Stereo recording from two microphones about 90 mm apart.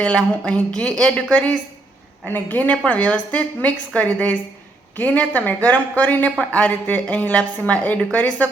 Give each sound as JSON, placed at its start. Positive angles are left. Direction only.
{"t": 0.0, "sound": "a woman's voice", "side_deg": 15}